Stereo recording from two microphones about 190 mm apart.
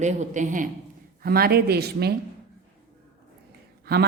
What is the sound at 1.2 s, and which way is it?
Speech, 50° right (ahead or behind).